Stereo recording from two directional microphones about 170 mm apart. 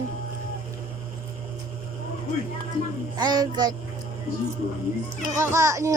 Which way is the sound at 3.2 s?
25° right (ahead or behind).